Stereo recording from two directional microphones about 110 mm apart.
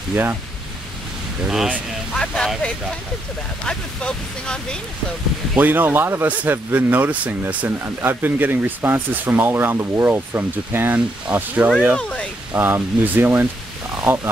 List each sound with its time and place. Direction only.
0.1 s speech: 20° right (ahead or behind)
2.1 s speech: 5° left (ahead or behind)
5.6 s speech: 15° right (ahead or behind)
12.0 s speech: 10° left (ahead or behind)
12.5 s speech: 20° right (ahead or behind)